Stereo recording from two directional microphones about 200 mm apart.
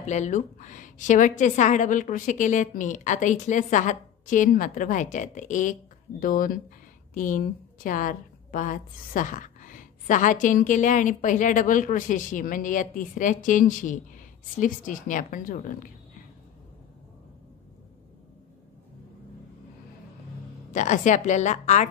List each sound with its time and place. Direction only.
0.0 s a woman's voice: 35° left (ahead or behind)
20.7 s a woman's voice: 40° left (ahead or behind)